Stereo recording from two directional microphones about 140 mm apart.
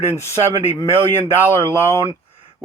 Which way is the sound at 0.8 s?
20° left (ahead or behind).